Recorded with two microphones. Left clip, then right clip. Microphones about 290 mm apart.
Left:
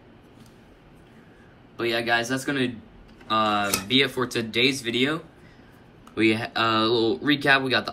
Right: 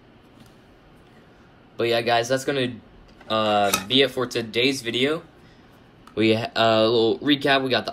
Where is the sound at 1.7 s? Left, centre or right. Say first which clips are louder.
Right 3 dB; centre.